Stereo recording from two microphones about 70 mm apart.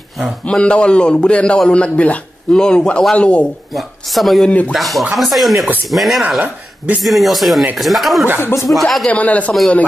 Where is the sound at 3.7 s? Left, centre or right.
Centre.